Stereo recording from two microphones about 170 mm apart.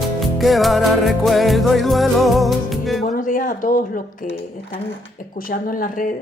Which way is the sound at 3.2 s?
50° left (ahead or behind).